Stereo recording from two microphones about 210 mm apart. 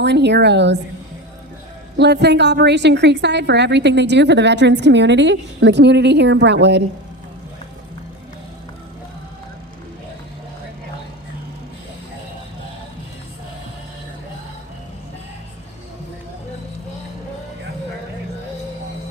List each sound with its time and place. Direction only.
0.0 s a woman's voice: 55° right (ahead or behind)
2.0 s a woman's voice: 55° right (ahead or behind)